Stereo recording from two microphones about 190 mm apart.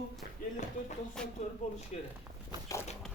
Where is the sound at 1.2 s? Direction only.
5° left (ahead or behind).